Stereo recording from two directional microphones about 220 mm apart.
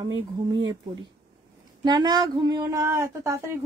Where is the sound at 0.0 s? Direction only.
20° right (ahead or behind).